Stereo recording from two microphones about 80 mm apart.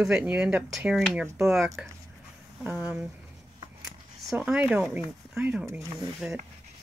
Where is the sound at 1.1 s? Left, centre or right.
Centre.